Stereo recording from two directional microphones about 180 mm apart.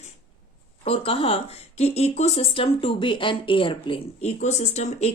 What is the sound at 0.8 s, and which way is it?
Speech, 30° left (ahead or behind).